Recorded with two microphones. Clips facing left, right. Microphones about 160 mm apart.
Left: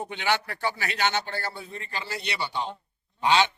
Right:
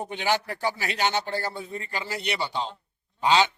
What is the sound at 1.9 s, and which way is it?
Speech, 20° right (ahead or behind).